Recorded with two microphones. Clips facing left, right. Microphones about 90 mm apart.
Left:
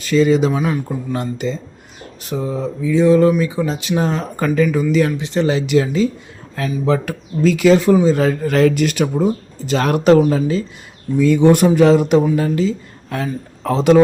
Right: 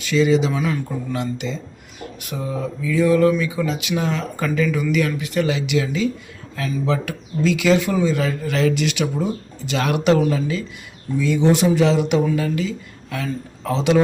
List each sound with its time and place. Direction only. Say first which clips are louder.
0.0 s speech: left 3 dB; 40° left (ahead or behind)
0.5 s speech: left 3 dB; 30° left (ahead or behind)
11.2 s a woman's voice: left 6 dB; 55° left (ahead or behind)